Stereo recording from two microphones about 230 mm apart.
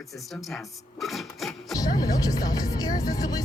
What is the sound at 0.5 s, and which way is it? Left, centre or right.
Speech, centre.